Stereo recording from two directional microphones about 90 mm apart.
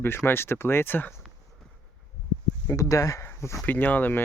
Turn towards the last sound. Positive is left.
turn(degrees=20)  # may be behind; listen again after turning